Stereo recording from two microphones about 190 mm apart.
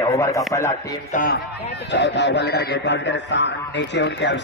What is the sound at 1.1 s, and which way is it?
Speech, 55° left (ahead or behind).